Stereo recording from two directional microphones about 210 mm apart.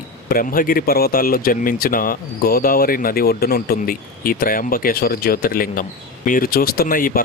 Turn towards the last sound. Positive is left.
turn(degrees=40)  # may be behind; listen again after turning